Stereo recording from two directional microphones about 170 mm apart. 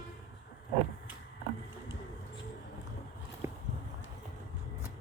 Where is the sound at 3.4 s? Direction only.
15° right (ahead or behind).